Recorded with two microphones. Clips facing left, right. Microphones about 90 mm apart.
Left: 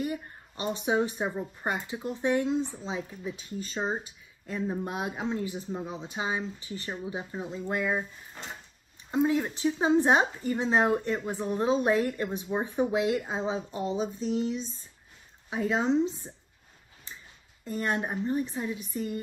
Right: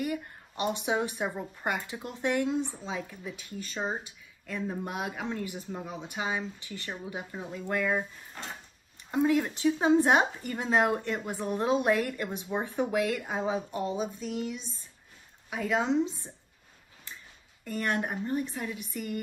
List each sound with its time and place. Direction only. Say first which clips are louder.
0.0 s a sound: even; 25° left (ahead or behind)
0.7 s a woman's voice: left 2 dB; 30° left (ahead or behind)
4.8 s a woman's voice: left 2 dB; 25° left (ahead or behind)
9.1 s a woman's voice: even; 20° left (ahead or behind)
17.6 s a woman's voice: left 1 dB; 25° left (ahead or behind)